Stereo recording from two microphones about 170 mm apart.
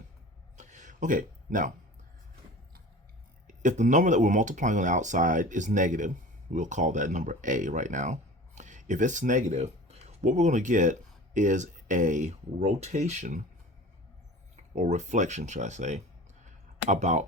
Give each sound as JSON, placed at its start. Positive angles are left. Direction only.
{"t": 0.5, "sound": "a sound", "side_deg": -45}
{"t": 3.4, "sound": "speech", "side_deg": -45}
{"t": 14.5, "sound": "speech", "side_deg": -45}